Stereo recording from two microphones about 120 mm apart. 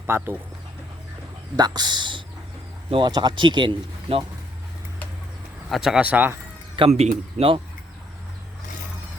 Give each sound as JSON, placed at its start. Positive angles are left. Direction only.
{"t": 0.0, "sound": "speech", "side_deg": -20}
{"t": 1.5, "sound": "speech", "side_deg": -35}
{"t": 5.6, "sound": "speech", "side_deg": 0}
{"t": 6.7, "sound": "speech", "side_deg": -55}